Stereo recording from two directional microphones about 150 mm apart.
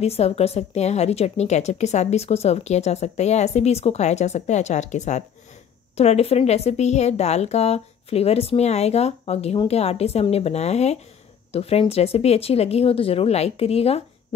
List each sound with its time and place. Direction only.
0.0 s a woman's voice: 45° left (ahead or behind)